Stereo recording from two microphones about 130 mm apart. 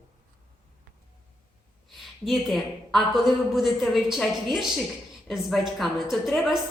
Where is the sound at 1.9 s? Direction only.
Centre (ahead or behind).